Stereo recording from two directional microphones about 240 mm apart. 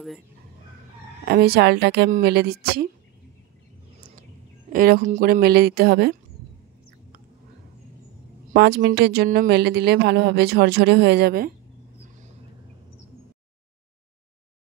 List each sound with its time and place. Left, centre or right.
1.2 s a woman's voice: right
4.7 s a woman's voice: right
8.5 s speech: right